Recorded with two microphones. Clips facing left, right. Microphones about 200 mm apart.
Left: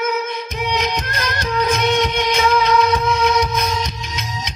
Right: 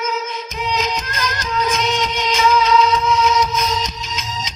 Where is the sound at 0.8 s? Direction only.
60° left (ahead or behind).